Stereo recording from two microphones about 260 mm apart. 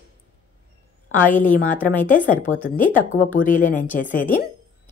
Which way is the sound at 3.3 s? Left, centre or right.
Left.